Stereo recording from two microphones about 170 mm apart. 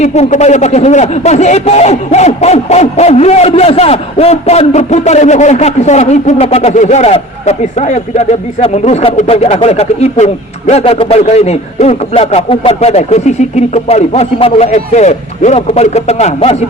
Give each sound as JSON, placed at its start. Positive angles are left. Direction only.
{"t": 0.0, "sound": "speech", "side_deg": 40}